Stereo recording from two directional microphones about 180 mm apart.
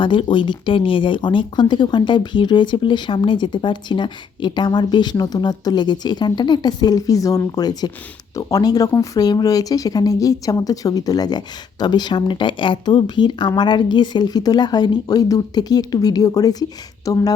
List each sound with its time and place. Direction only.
0.0 s speech: 25° left (ahead or behind)